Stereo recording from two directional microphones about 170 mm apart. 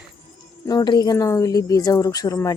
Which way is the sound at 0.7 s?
25° left (ahead or behind).